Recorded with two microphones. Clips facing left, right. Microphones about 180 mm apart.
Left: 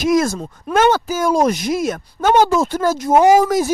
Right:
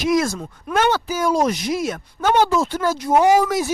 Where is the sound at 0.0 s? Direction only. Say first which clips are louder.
Left 3 dB; 45° left (ahead or behind).